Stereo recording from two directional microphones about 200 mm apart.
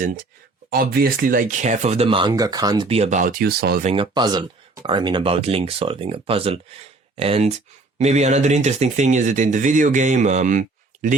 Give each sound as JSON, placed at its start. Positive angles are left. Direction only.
{"t": 0.7, "sound": "speech", "side_deg": -50}
{"t": 3.8, "sound": "speech", "side_deg": -25}